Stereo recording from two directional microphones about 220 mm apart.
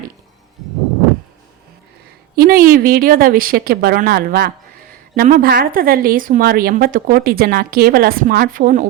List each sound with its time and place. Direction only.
2.3 s a woman's voice: 45° right (ahead or behind)